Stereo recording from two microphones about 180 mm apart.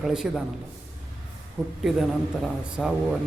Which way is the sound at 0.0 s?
5° right (ahead or behind).